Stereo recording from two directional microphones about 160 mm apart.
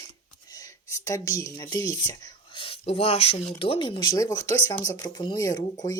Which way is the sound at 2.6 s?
35° left (ahead or behind).